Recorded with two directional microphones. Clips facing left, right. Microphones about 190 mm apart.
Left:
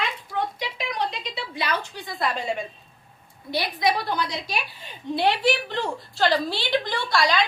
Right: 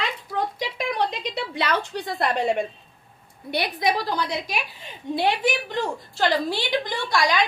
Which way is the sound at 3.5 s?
55° right (ahead or behind).